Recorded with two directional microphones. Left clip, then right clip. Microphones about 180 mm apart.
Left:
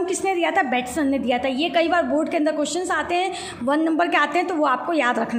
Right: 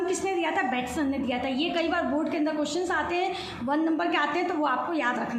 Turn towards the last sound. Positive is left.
turn(degrees=45)  # may be behind; listen again after turning